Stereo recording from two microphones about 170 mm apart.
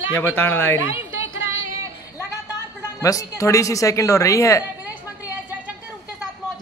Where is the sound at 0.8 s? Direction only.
15° right (ahead or behind).